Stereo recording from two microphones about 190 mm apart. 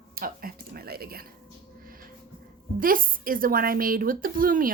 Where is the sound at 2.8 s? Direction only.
45° right (ahead or behind).